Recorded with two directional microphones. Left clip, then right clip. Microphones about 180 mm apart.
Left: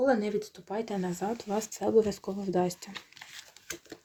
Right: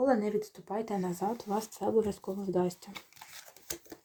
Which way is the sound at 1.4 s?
25° left (ahead or behind).